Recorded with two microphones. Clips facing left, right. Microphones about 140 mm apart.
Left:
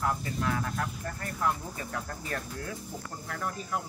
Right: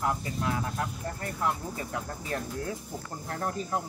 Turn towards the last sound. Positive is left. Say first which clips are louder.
# right 3 dB
turn(degrees=-30)  # may be behind; listen again after turning